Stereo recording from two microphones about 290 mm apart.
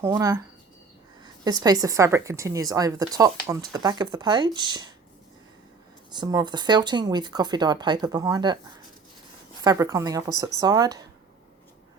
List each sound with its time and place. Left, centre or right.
0.0 s speech: centre
6.1 s speech: centre
9.6 s speech: centre